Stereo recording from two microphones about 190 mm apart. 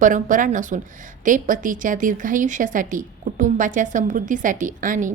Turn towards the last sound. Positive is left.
turn(degrees=-45)  # may be behind; listen again after turning